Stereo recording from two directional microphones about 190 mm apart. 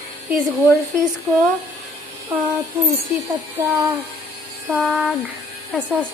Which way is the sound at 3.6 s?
15° right (ahead or behind).